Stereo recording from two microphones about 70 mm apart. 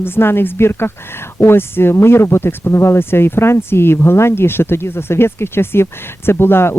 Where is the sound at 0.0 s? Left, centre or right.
Left.